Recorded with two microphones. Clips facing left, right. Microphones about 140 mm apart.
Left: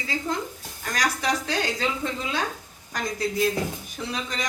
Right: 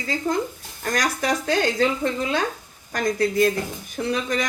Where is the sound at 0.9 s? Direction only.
50° right (ahead or behind).